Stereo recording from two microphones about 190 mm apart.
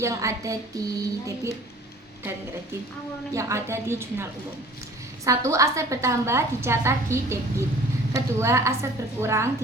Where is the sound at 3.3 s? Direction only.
15° right (ahead or behind).